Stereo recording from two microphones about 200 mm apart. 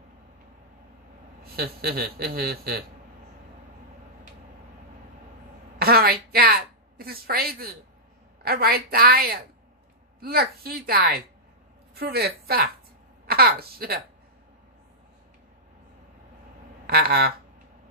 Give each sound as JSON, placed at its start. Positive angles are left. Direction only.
{"t": 1.4, "sound": "speech", "side_deg": -50}
{"t": 5.8, "sound": "a sound", "side_deg": -50}
{"t": 8.4, "sound": "a woman's voice", "side_deg": -50}
{"t": 16.8, "sound": "speech", "side_deg": -50}